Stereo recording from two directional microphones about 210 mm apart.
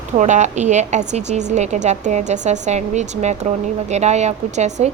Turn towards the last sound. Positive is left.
turn(degrees=-35)  # may be behind; listen again after turning